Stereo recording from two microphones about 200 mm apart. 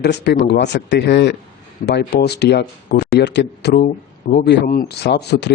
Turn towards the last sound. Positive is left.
turn(degrees=55)  # may be behind; listen again after turning